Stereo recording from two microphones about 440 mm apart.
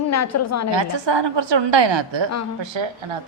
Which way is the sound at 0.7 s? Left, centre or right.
Right.